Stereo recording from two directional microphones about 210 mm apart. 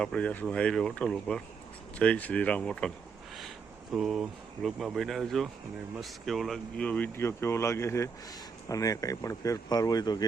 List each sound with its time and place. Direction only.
0.0 s speech: 5° left (ahead or behind)
3.9 s speech: centre (ahead or behind); by 10.2 s 20° left (ahead or behind)